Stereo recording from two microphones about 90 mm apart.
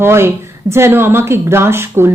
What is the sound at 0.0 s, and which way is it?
Speech, 25° right (ahead or behind).